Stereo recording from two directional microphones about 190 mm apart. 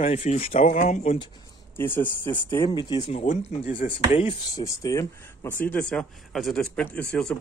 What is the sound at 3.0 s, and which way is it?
Speech, 35° left (ahead or behind).